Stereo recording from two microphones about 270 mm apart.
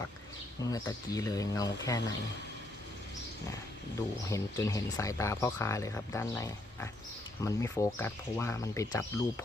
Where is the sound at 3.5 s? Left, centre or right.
Centre.